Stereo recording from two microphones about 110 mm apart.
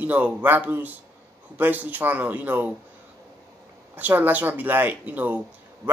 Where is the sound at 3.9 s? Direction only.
15° right (ahead or behind).